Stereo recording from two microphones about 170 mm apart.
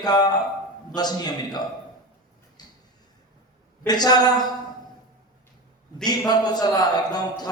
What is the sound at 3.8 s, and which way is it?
Speech, 25° left (ahead or behind).